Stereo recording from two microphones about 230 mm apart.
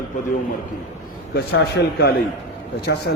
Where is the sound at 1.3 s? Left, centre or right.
Left.